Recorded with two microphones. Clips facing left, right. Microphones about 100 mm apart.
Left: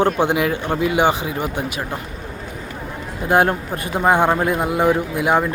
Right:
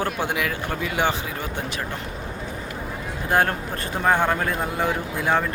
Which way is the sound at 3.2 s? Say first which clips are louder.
Left 5 dB; 20° left (ahead or behind).